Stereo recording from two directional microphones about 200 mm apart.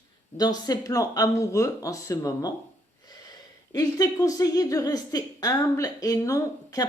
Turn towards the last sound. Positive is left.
turn(degrees=15)  # may be behind; listen again after turning